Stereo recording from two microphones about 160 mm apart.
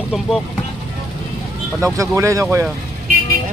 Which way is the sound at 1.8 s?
20° right (ahead or behind).